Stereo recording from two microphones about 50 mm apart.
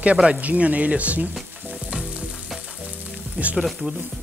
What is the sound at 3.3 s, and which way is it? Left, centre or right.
Speech, right.